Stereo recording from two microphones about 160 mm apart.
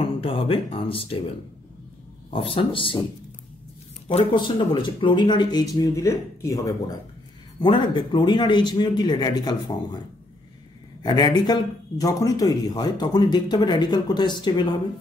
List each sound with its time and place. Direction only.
0.0 s speech: 35° left (ahead or behind)
2.3 s speech: 35° left (ahead or behind)
4.1 s speech: 30° left (ahead or behind)
11.0 s speech: 25° left (ahead or behind)